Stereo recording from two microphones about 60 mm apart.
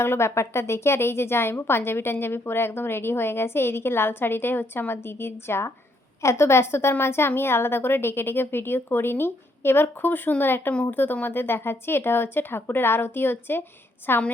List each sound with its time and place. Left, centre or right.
0.0 s a woman's voice: left